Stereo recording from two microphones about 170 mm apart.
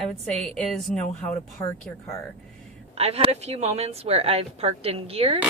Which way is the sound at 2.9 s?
35° right (ahead or behind).